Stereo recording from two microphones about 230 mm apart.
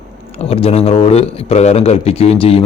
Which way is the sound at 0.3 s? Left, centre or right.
Left.